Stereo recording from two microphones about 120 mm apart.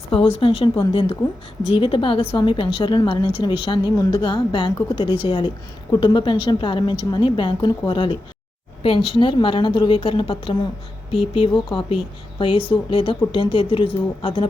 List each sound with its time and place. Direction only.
0.1 s a woman's voice: 50° left (ahead or behind)